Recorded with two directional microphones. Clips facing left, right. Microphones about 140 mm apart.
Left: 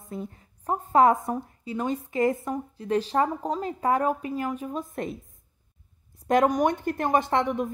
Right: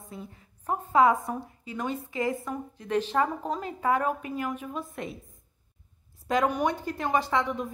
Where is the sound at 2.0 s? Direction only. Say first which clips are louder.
Left 7 dB; 50° left (ahead or behind).